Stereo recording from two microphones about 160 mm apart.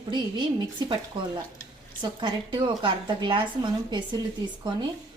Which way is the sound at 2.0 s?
30° right (ahead or behind).